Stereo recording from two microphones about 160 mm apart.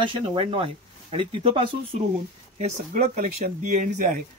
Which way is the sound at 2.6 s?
50° right (ahead or behind).